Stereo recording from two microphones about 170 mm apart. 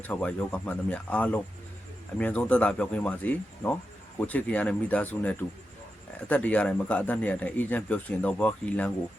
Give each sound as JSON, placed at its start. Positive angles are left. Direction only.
{"t": 0.0, "sound": "speech", "side_deg": 10}